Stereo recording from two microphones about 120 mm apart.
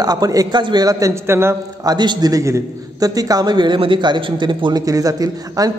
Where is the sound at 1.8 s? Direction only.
35° right (ahead or behind).